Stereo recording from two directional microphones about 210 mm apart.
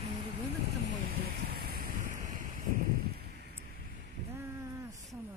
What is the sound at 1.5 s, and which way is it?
Vehicle, 45° right (ahead or behind).